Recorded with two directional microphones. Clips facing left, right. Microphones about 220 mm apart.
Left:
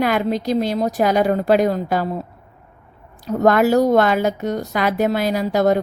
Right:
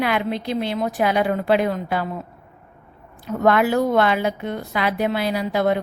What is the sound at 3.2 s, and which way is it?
A woman's voice, 40° left (ahead or behind).